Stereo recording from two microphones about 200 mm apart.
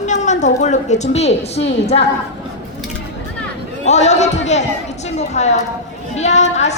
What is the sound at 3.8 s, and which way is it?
A woman's voice, 35° left (ahead or behind).